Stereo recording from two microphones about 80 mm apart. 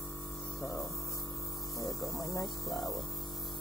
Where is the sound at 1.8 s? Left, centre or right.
Left.